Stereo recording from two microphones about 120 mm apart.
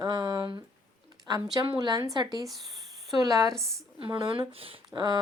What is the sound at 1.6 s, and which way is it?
A woman's voice, 35° right (ahead or behind).